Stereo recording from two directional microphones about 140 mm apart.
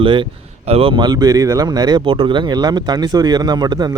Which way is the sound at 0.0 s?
35° right (ahead or behind).